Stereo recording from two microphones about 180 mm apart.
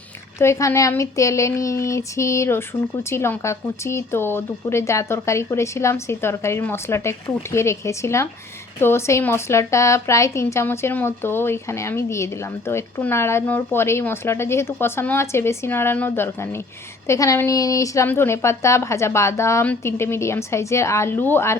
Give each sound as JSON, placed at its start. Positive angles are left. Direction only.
{"t": 0.3, "sound": "speech", "side_deg": 15}